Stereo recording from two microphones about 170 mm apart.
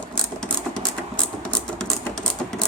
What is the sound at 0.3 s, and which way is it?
Sewing machine, 5° left (ahead or behind).